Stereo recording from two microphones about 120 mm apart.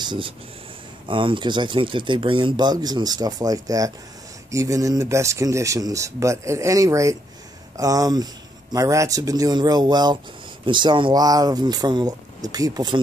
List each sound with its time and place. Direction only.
0.0 s speech: 40° right (ahead or behind)